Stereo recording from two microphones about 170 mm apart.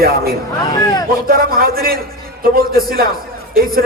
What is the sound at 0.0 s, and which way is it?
A man's voice, 65° right (ahead or behind).